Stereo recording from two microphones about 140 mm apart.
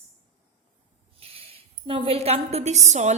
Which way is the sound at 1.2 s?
45° right (ahead or behind).